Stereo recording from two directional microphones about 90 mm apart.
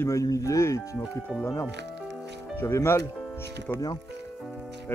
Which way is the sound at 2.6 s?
30° left (ahead or behind).